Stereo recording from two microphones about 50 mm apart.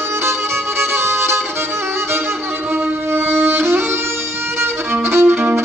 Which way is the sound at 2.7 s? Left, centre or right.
Right.